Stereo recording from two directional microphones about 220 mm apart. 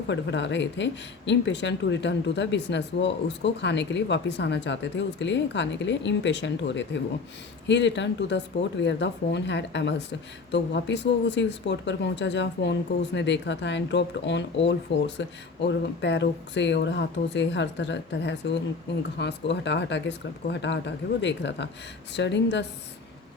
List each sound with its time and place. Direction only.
0.1 s speech: 55° left (ahead or behind)